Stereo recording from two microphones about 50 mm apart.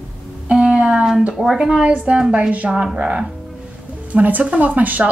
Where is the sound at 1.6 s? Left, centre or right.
Centre.